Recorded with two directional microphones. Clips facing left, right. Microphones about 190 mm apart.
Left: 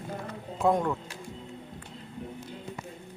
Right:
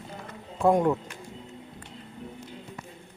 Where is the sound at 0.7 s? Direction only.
15° right (ahead or behind).